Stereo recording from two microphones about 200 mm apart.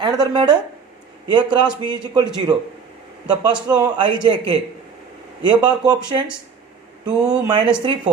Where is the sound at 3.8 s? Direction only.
25° right (ahead or behind).